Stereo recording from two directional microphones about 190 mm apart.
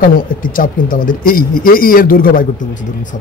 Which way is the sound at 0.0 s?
45° left (ahead or behind).